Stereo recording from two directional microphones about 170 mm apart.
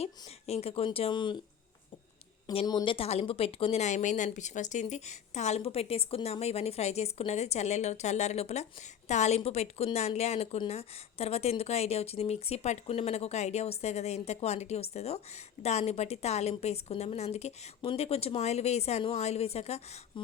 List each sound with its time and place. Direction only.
0.0 s speech: 35° left (ahead or behind)
2.5 s speech: 30° left (ahead or behind)